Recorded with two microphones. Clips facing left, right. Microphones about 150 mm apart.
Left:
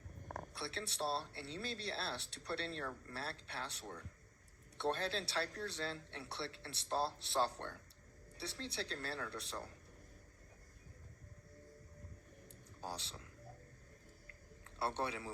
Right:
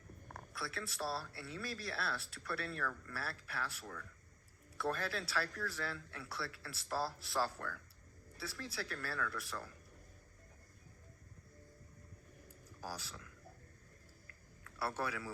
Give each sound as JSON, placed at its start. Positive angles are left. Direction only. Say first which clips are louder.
{"t": 0.5, "sound": "speech", "louder": "right 3 dB", "side_deg": 30}
{"t": 12.8, "sound": "speech", "louder": "even", "side_deg": 25}
{"t": 14.3, "sound": "a sound", "louder": "left 2 dB", "side_deg": 25}